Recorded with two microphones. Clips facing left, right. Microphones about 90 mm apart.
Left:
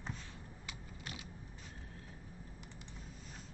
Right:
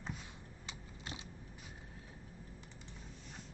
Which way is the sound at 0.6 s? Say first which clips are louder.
Right 1 dB; 25° right (ahead or behind).